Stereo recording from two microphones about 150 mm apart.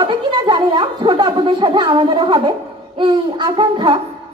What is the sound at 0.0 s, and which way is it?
Speech, 35° right (ahead or behind).